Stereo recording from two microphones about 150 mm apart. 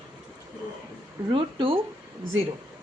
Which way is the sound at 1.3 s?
35° right (ahead or behind).